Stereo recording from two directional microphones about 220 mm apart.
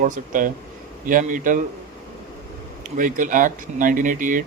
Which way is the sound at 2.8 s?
35° right (ahead or behind).